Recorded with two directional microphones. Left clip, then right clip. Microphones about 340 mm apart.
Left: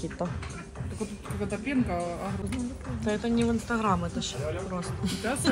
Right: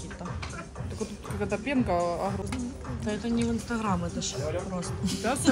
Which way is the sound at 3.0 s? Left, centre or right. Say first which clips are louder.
Left 3 dB; centre.